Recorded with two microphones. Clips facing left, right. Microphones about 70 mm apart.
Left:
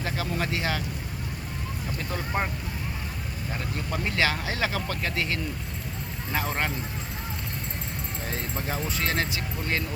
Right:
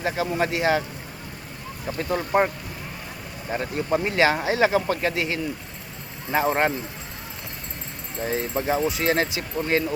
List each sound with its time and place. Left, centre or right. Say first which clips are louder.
0.0 s speech: right 6 dB; right
1.9 s speech: right 9 dB; right
3.5 s speech: right 9 dB; right
8.2 s speech: right 9 dB; centre